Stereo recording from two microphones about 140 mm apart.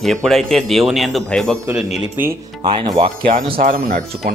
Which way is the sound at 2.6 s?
35° right (ahead or behind).